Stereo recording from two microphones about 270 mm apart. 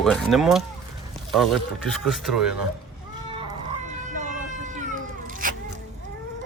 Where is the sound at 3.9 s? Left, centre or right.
Right.